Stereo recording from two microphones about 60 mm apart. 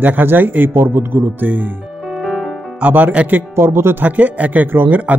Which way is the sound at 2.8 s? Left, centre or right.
Right.